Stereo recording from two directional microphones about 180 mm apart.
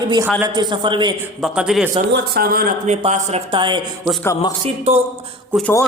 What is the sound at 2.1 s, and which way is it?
Speech, 60° right (ahead or behind).